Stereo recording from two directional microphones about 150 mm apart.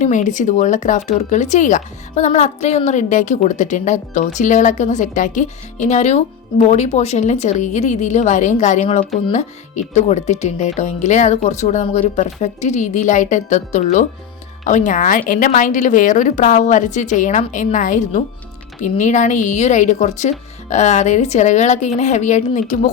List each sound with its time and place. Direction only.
0.0 s a woman's voice: 55° left (ahead or behind)